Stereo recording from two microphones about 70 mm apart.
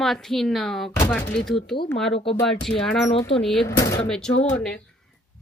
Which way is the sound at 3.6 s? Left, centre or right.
Left.